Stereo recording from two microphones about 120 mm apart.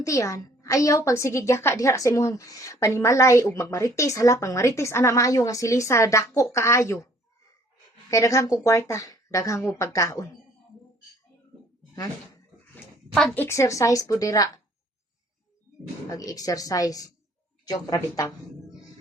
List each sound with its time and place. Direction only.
0.0 s a woman's voice: 25° left (ahead or behind)
8.1 s a woman's voice: 25° left (ahead or behind)
13.3 s a woman's voice: 20° left (ahead or behind)
16.0 s a woman's voice: 30° left (ahead or behind)